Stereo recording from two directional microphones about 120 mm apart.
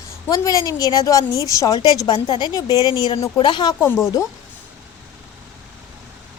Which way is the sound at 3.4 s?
40° left (ahead or behind).